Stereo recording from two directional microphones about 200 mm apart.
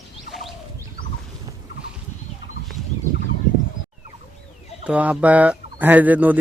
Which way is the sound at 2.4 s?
70° left (ahead or behind).